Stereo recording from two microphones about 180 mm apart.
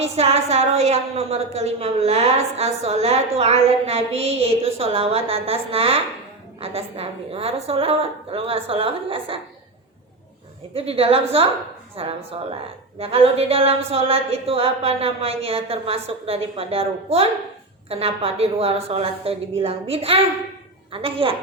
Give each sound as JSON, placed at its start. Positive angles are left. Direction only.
{"t": 0.0, "sound": "a woman's voice", "side_deg": -35}
{"t": 10.8, "sound": "a woman's voice", "side_deg": -35}